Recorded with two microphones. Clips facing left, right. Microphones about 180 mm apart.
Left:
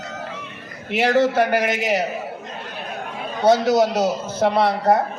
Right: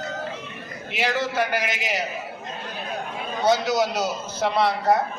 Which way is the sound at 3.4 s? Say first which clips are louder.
Left 5 dB; 55° left (ahead or behind).